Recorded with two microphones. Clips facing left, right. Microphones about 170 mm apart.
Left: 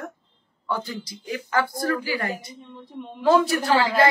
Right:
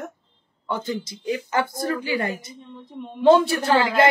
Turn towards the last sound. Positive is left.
turn(degrees=-20)  # may be behind; listen again after turning